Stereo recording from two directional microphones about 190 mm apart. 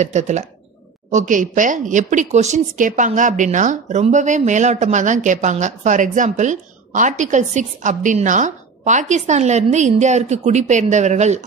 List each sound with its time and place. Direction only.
0.0 s a woman's voice: 40° right (ahead or behind)